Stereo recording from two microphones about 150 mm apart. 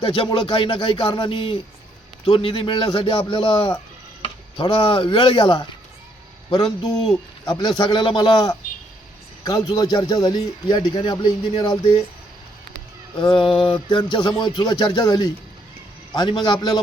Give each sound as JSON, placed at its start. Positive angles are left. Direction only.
{"t": 0.0, "sound": "a man's voice", "side_deg": 35}
{"t": 13.1, "sound": "a man's voice", "side_deg": 30}